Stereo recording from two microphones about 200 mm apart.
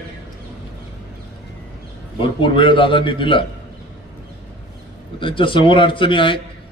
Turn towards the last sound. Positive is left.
turn(degrees=25)  # may be behind; listen again after turning